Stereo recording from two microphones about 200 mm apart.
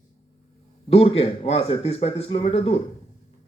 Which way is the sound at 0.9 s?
30° left (ahead or behind).